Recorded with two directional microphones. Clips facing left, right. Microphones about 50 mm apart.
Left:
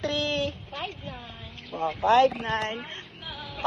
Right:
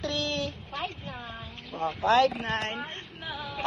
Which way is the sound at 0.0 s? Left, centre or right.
Left.